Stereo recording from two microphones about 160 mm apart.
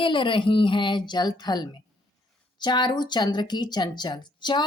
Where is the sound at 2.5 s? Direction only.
25° left (ahead or behind).